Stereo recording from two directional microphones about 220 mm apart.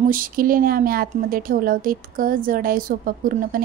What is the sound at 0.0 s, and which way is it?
Speech, 40° right (ahead or behind).